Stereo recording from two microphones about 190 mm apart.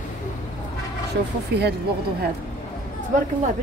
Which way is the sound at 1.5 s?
60° right (ahead or behind).